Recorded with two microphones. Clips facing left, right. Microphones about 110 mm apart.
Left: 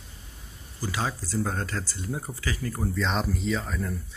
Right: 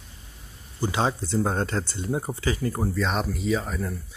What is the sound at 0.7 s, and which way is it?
Speech, 25° right (ahead or behind).